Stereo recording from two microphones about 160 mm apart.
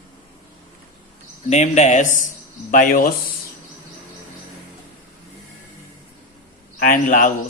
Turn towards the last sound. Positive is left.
turn(degrees=55)  # may be behind; listen again after turning